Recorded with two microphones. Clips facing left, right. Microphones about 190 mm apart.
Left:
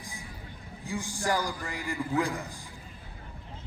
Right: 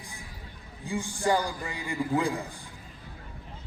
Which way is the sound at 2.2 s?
30° right (ahead or behind).